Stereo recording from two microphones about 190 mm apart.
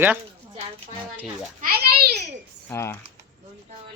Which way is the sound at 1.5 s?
55° right (ahead or behind).